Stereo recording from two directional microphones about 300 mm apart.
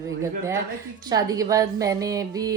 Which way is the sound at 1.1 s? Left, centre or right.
Centre.